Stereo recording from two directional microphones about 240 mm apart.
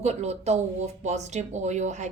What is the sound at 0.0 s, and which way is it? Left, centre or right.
Speech, right.